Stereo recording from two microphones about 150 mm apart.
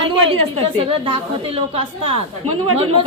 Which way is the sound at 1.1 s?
40° right (ahead or behind).